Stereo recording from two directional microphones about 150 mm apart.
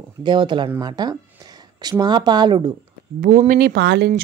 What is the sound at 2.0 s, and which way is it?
Speech, 30° right (ahead or behind).